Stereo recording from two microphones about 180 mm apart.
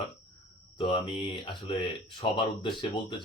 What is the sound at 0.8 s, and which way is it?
Speech, 25° left (ahead or behind).